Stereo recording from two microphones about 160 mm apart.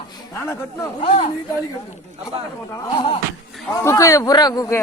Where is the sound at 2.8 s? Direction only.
30° left (ahead or behind).